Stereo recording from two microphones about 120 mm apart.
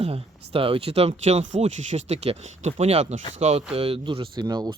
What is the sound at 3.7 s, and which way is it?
Speech, 50° right (ahead or behind).